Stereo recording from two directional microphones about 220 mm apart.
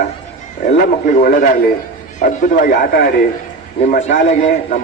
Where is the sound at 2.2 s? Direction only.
35° left (ahead or behind).